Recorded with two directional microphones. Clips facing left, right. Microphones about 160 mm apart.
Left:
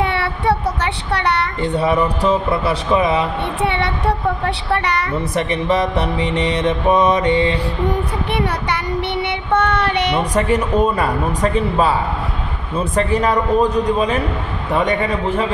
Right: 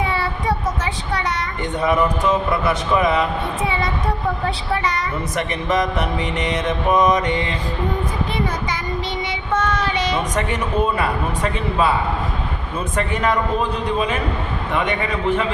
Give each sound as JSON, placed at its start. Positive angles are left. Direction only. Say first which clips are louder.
{"t": 0.0, "sound": "child singing", "louder": "left 3 dB", "side_deg": 70}
{"t": 1.1, "sound": "a woman's voice", "louder": "left 5 dB", "side_deg": 70}
{"t": 1.6, "sound": "music", "louder": "even", "side_deg": 30}
{"t": 3.6, "sound": "a woman's voice", "louder": "left 5 dB", "side_deg": 70}
{"t": 5.3, "sound": "music", "louder": "left 3 dB", "side_deg": 30}
{"t": 7.9, "sound": "child singing", "louder": "left 3 dB", "side_deg": 70}
{"t": 10.3, "sound": "music", "louder": "left 5 dB", "side_deg": 35}
{"t": 12.9, "sound": "music", "louder": "left 3 dB", "side_deg": 35}